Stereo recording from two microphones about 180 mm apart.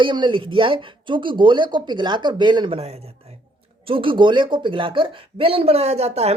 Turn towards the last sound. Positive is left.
turn(degrees=-35)  # may be behind; listen again after turning